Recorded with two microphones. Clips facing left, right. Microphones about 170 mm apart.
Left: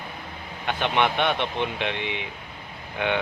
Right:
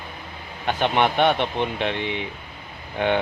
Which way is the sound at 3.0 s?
35° right (ahead or behind).